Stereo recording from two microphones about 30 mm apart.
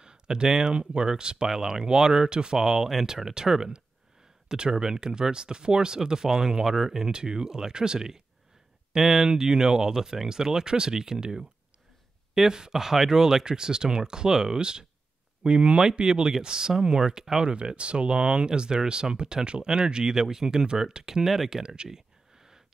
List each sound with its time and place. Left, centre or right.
0.0 s speech: right
2.6 s speech: centre
7.1 s speech: right
8.9 s speech: centre
12.4 s speech: right
17.1 s speech: centre
17.4 s speech: right
21.8 s a sound: centre